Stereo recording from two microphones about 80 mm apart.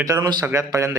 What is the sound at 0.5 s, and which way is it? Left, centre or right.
Speech, right.